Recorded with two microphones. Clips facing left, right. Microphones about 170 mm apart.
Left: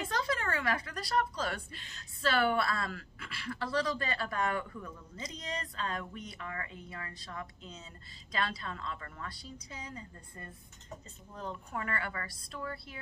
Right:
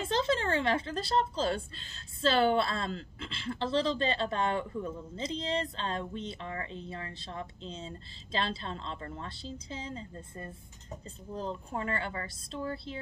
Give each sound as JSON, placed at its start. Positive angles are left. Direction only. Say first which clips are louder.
{"t": 0.0, "sound": "speech", "louder": "right 5 dB", "side_deg": -25}